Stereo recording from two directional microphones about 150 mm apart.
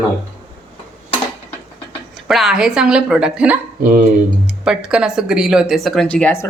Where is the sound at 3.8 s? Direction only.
65° right (ahead or behind).